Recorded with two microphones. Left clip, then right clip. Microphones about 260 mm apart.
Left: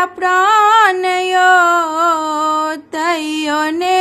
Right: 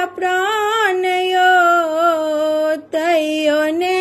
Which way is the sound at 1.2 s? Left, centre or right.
Centre.